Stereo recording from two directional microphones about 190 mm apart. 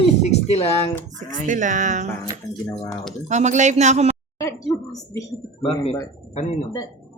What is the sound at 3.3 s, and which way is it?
Speech, 40° right (ahead or behind).